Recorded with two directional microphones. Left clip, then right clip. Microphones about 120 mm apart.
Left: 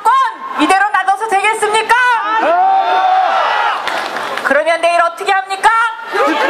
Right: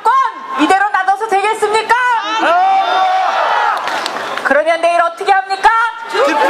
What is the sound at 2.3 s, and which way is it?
Crowd, 45° right (ahead or behind).